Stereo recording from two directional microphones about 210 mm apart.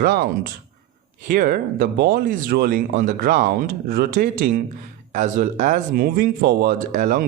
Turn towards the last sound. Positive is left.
turn(degrees=-40)  # may be behind; listen again after turning